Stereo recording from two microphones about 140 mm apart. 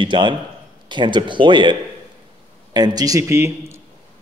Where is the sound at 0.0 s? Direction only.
35° right (ahead or behind); by 3.8 s 20° right (ahead or behind).